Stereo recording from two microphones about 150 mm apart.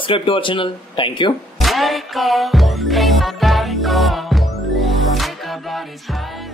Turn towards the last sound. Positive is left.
turn(degrees=0)  # may be behind; listen again after turning